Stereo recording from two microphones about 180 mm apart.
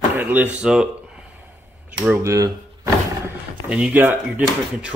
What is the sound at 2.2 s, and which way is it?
Speech, 15° right (ahead or behind).